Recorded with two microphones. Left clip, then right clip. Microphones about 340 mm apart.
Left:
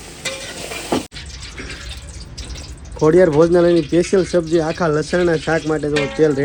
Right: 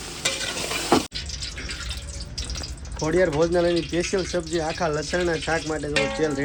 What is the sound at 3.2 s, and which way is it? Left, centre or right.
Speech, left.